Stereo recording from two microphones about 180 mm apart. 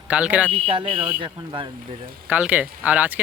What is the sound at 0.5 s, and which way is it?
Speech, 30° right (ahead or behind).